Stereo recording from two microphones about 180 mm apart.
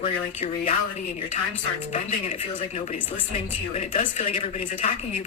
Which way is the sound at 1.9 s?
40° left (ahead or behind).